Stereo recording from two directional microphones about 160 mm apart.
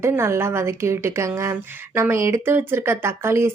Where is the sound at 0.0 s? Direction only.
15° right (ahead or behind).